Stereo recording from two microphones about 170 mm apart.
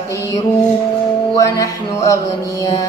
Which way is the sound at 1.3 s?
20° left (ahead or behind).